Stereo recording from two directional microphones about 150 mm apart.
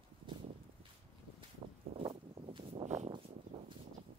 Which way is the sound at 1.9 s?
35° right (ahead or behind).